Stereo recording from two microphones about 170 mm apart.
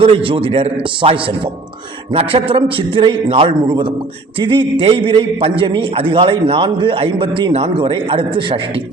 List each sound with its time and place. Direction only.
0.0 s a man's voice: 30° right (ahead or behind)